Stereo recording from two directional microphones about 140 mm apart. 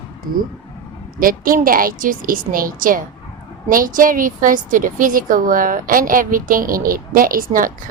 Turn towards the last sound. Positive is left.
turn(degrees=-80)